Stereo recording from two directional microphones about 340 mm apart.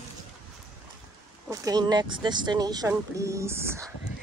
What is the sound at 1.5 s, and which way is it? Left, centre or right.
Speech, centre.